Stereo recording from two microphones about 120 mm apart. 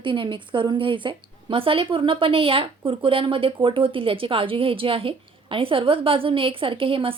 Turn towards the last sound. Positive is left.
turn(degrees=-50)  # may be behind; listen again after turning